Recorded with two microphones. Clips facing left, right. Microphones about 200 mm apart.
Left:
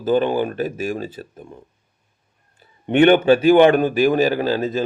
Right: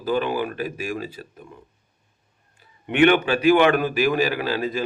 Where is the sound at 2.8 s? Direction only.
30° left (ahead or behind).